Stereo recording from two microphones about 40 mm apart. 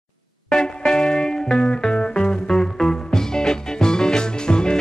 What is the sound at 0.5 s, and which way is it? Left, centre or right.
Music, centre.